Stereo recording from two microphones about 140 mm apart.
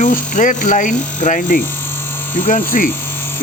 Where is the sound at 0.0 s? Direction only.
65° left (ahead or behind).